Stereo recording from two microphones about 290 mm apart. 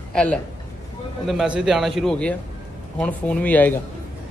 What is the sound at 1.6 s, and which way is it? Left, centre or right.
Speech, centre.